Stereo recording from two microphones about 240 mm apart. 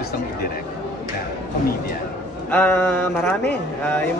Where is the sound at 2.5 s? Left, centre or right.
Centre.